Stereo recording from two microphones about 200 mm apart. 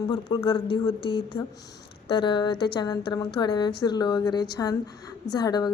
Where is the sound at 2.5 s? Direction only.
55° left (ahead or behind).